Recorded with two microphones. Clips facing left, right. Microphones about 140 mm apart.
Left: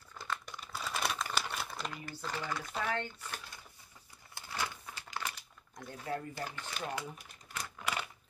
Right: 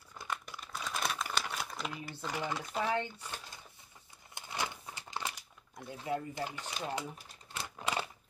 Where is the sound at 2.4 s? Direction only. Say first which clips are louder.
Right 3 dB; 20° right (ahead or behind).